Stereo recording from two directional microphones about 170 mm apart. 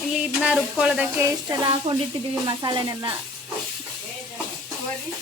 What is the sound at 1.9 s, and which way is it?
Music, 30° right (ahead or behind).